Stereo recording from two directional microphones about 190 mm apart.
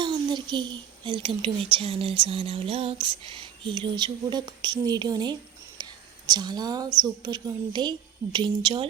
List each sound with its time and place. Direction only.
0.0 s a woman's voice: 25° right (ahead or behind)